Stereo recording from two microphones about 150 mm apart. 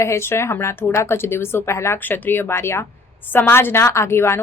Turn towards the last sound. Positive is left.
turn(degrees=15)  # may be behind; listen again after turning